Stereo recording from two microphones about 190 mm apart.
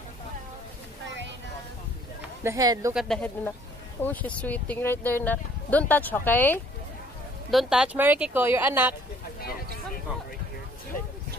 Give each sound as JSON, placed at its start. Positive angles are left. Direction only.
{"t": 2.4, "sound": "speech", "side_deg": -20}
{"t": 2.9, "sound": "speech", "side_deg": 0}
{"t": 7.5, "sound": "speech", "side_deg": -5}